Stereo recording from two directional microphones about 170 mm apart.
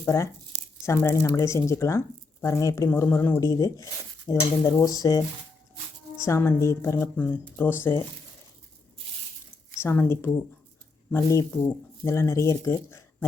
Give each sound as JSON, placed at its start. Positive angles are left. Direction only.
{"t": 0.0, "sound": "speech", "side_deg": 20}
{"t": 9.8, "sound": "speech", "side_deg": 15}